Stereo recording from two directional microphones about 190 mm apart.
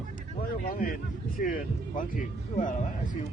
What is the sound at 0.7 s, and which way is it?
A man's voice, 50° left (ahead or behind).